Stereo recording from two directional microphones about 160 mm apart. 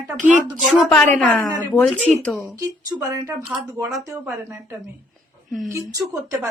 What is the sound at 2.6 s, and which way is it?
A woman's voice, 20° right (ahead or behind).